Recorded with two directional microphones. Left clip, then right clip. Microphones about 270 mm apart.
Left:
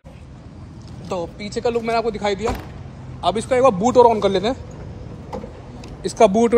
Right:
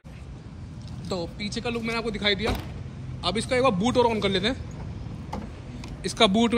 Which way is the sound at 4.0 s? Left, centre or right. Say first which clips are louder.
Left 9 dB; centre.